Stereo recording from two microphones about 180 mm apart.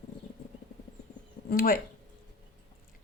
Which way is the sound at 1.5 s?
50° left (ahead or behind).